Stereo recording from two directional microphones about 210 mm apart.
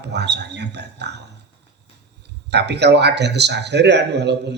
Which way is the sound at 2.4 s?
55° right (ahead or behind).